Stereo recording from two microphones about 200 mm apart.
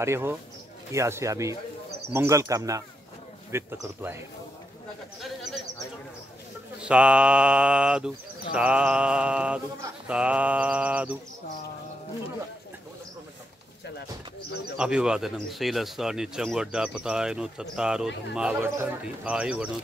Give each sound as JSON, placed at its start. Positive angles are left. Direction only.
{"t": 0.0, "sound": "speech", "side_deg": -15}
{"t": 5.2, "sound": "bird", "side_deg": 0}
{"t": 6.8, "sound": "speech", "side_deg": -5}
{"t": 14.8, "sound": "speech", "side_deg": -5}